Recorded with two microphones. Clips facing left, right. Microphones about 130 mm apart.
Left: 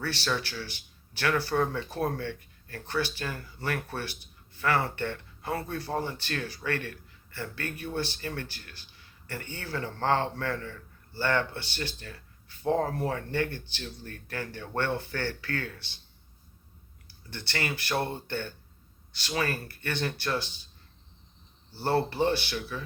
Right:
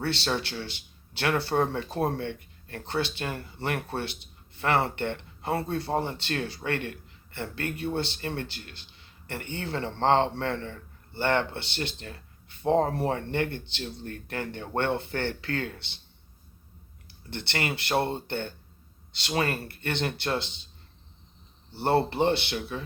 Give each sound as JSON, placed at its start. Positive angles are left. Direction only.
{"t": 0.0, "sound": "speech", "side_deg": -25}
{"t": 17.2, "sound": "speech", "side_deg": -25}
{"t": 21.8, "sound": "speech", "side_deg": -25}